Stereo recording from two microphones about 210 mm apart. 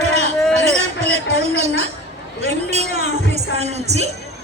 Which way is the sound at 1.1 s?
30° right (ahead or behind).